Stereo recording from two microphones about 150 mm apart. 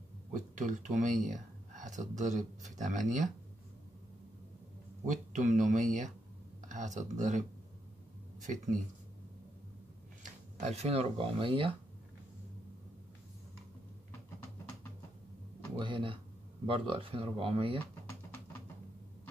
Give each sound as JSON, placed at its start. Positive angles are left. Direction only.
{"t": 0.3, "sound": "speech", "side_deg": -55}
{"t": 5.0, "sound": "speech", "side_deg": -55}
{"t": 10.6, "sound": "speech", "side_deg": -45}
{"t": 15.8, "sound": "speech", "side_deg": -35}